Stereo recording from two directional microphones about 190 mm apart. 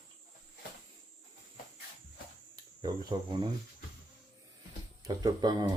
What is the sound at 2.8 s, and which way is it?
Speech, 20° right (ahead or behind).